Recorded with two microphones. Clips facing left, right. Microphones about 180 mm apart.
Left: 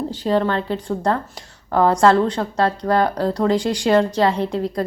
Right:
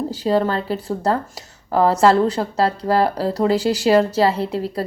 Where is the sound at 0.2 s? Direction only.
25° right (ahead or behind).